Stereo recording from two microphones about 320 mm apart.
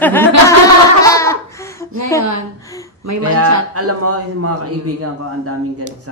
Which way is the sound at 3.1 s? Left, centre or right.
Right.